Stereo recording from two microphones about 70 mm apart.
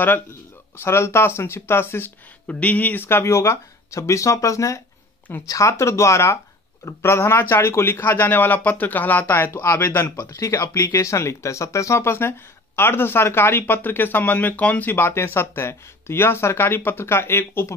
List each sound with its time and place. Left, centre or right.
0.7 s speech: left
2.4 s speech: left
15.0 s speech: left